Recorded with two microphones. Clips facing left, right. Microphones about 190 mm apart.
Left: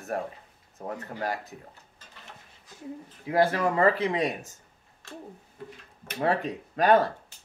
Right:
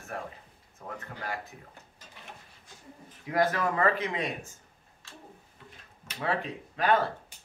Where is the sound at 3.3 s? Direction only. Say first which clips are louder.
Left 3 dB; 30° left (ahead or behind).